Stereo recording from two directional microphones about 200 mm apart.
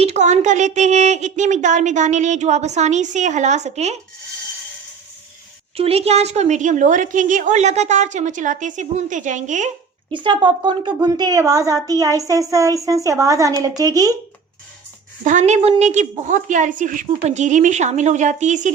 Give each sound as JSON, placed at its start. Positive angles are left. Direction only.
{"t": 0.0, "sound": "a woman's voice", "side_deg": -35}
{"t": 5.7, "sound": "a woman's voice", "side_deg": -30}
{"t": 10.1, "sound": "a woman's voice", "side_deg": -25}
{"t": 15.2, "sound": "a woman's voice", "side_deg": -35}